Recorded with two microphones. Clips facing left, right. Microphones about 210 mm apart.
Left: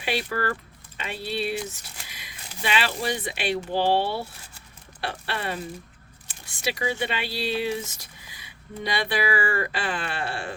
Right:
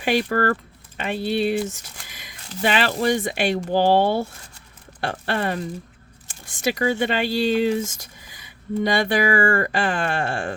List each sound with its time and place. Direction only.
0.0 s speech: 50° right (ahead or behind)
2.0 s a sound: 50° right (ahead or behind)
2.6 s speech: 50° right (ahead or behind)